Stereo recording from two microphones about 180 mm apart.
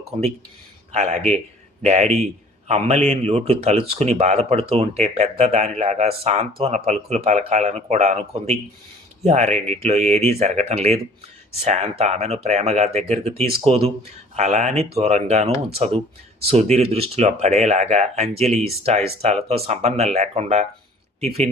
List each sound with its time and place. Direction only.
0.0 s speech: 35° right (ahead or behind)